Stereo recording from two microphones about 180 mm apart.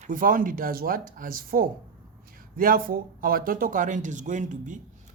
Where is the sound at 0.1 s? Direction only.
50° right (ahead or behind).